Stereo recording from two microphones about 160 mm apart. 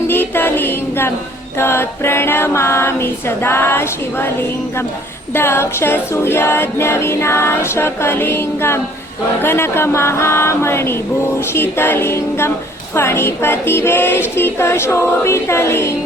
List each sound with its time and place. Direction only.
0.1 s music: 15° left (ahead or behind)
1.5 s a capella: 15° left (ahead or behind)